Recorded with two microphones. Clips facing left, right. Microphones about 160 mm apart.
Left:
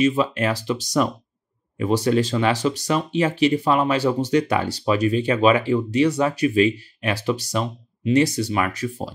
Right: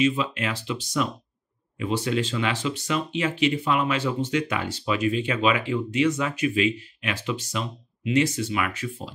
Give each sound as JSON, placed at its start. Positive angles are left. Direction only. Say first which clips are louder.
{"t": 0.2, "sound": "speech", "louder": "left 6 dB", "side_deg": 40}